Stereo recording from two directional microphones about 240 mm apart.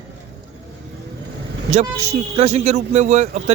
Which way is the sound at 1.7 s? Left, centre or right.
Right.